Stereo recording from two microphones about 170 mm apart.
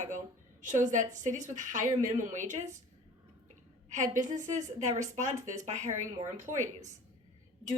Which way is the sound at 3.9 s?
50° right (ahead or behind).